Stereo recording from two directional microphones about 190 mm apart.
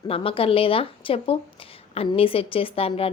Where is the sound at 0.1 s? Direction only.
30° left (ahead or behind).